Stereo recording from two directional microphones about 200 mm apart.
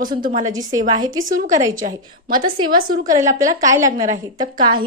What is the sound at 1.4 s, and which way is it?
Speech, 15° right (ahead or behind).